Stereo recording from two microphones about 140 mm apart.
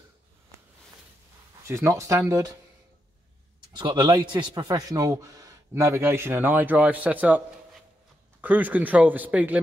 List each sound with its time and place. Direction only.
1.7 s speech: 20° right (ahead or behind)
3.7 s speech: 30° right (ahead or behind); by 9.6 s 10° right (ahead or behind)